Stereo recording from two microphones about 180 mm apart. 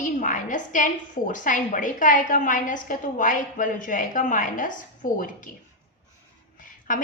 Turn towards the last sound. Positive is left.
turn(degrees=50)  # may be behind; listen again after turning